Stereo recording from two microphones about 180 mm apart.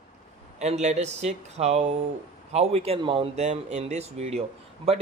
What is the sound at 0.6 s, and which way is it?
Speech, 40° right (ahead or behind).